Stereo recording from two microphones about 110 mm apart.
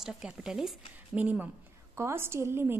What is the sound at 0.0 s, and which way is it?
Speech, 5° right (ahead or behind).